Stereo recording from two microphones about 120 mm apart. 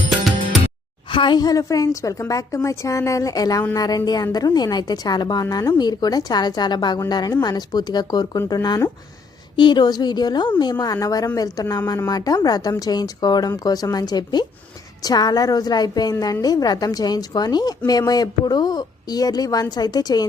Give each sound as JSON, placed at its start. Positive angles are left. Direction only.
{"t": 1.1, "sound": "a woman's voice", "side_deg": 40}